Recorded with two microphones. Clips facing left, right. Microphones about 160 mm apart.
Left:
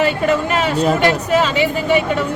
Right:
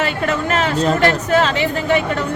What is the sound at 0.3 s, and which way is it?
Speech, 10° left (ahead or behind).